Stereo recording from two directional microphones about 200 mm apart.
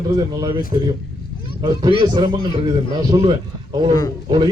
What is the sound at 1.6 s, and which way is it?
A man's voice, 25° right (ahead or behind).